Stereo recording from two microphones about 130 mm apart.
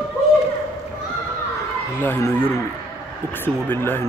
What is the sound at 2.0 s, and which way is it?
Speech, 15° left (ahead or behind).